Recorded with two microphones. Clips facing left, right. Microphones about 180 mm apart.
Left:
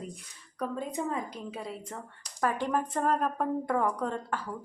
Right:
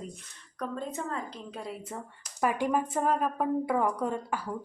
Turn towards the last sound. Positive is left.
turn(degrees=-10)  # may be behind; listen again after turning